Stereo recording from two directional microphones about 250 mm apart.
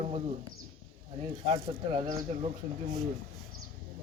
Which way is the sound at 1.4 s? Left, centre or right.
Right.